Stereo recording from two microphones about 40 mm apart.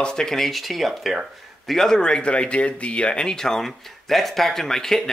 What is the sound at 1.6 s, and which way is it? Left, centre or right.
Speech, centre.